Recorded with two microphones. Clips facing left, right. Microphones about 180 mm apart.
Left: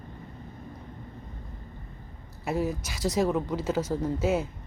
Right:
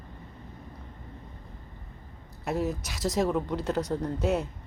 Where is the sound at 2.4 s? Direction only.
Centre (ahead or behind).